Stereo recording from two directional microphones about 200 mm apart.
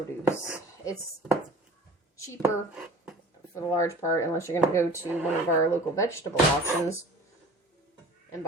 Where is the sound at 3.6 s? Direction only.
15° left (ahead or behind).